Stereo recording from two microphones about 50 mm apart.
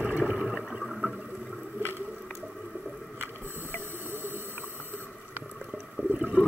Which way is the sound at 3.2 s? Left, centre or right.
Right.